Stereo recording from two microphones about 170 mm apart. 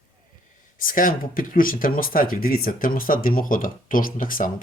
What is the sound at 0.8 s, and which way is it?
Speech, 55° left (ahead or behind).